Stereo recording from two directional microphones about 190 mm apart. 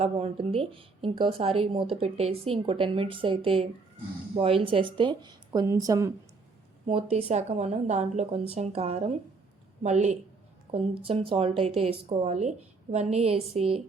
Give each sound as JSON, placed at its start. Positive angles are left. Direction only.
{"t": 0.0, "sound": "speech", "side_deg": -30}
{"t": 6.8, "sound": "speech", "side_deg": -30}